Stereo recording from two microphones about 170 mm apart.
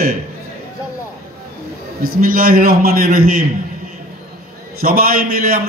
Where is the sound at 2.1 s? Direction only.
60° right (ahead or behind).